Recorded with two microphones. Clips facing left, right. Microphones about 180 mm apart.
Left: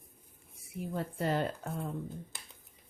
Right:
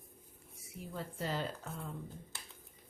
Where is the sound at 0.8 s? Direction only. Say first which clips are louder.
Left 6 dB; 60° left (ahead or behind).